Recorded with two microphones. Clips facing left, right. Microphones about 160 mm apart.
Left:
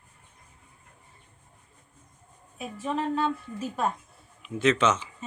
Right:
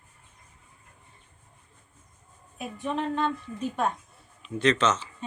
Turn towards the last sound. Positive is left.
turn(degrees=10)  # may be behind; listen again after turning